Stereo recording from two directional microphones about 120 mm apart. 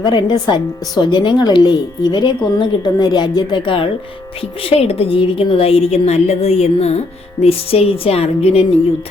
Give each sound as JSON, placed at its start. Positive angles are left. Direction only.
{"t": 0.0, "sound": "a woman's voice", "side_deg": 35}
{"t": 4.6, "sound": "a woman's voice", "side_deg": 55}